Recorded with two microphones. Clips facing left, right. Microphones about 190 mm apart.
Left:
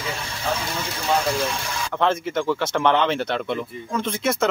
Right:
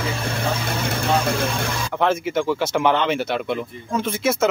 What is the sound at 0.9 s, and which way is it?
Speech, 55° right (ahead or behind).